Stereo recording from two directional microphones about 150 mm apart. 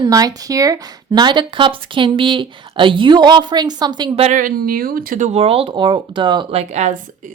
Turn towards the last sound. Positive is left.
turn(degrees=-50)  # may be behind; listen again after turning